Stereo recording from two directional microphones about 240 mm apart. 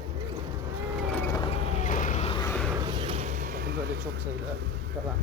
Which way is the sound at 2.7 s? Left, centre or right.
Centre.